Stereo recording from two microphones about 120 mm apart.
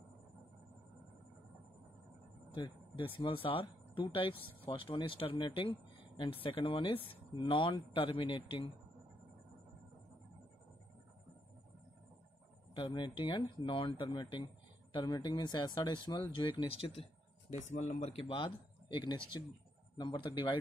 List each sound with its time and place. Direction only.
2.5 s speech: 40° left (ahead or behind)
12.7 s speech: 40° left (ahead or behind)
17.5 s speech: 85° left
18.1 s speech: 50° left (ahead or behind)
20.0 s speech: 35° left (ahead or behind)